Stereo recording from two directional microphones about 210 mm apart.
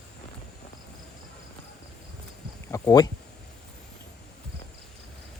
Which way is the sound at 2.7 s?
15° left (ahead or behind).